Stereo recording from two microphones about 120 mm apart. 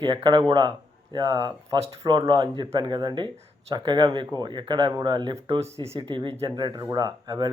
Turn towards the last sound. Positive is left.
turn(degrees=-30)  # may be behind; listen again after turning